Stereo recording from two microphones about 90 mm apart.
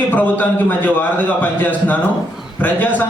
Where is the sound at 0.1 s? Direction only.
20° left (ahead or behind).